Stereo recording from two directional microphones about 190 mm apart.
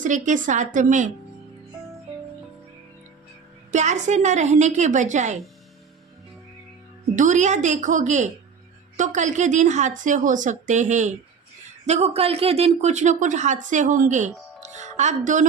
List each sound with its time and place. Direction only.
0.0 s speech: 40° right (ahead or behind)
3.7 s speech: 40° right (ahead or behind)
7.2 s speech: 40° right (ahead or behind)